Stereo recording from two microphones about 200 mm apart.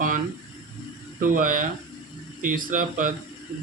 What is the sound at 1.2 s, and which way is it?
Speech, 40° right (ahead or behind).